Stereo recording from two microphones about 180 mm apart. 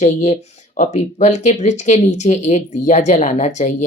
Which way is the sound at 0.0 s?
40° left (ahead or behind).